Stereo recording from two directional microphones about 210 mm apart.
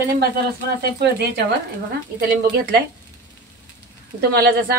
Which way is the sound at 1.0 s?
55° right (ahead or behind).